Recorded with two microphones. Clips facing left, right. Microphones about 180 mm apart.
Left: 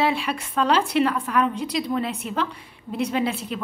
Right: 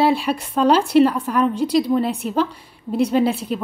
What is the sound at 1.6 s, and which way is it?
Speech, 5° right (ahead or behind).